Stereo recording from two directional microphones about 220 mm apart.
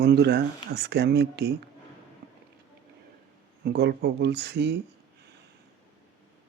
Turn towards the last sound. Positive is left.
turn(degrees=-50)  # may be behind; listen again after turning